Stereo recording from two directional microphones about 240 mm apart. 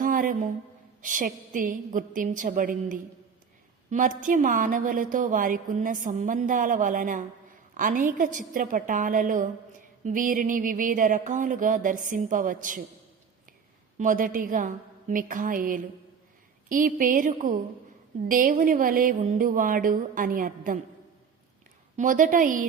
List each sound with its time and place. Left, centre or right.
0.0 s a sound: right
1.0 s a woman's voice: right
14.0 s a woman's voice: right
21.9 s a woman's voice: right